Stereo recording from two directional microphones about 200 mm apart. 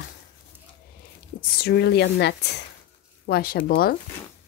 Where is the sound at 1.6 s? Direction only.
55° left (ahead or behind).